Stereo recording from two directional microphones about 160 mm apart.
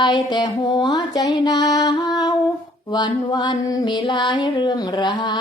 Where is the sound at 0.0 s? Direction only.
25° left (ahead or behind).